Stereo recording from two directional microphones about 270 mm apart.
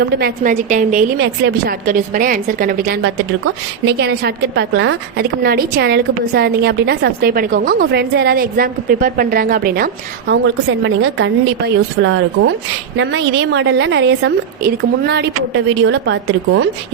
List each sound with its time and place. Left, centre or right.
0.0 s a woman's voice: right
1.2 s a woman's voice: right